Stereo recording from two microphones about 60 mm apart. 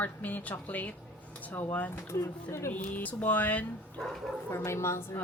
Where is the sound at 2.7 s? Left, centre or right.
Left.